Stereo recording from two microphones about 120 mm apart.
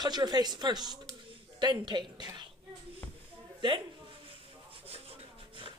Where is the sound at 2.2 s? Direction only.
35° right (ahead or behind).